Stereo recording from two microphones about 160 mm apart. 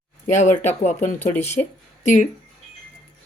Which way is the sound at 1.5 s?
50° left (ahead or behind).